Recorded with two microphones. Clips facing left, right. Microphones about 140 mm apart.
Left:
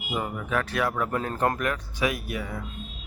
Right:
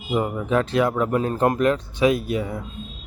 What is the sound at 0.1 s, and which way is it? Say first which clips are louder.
Speech: right 7 dB; 25° right (ahead or behind).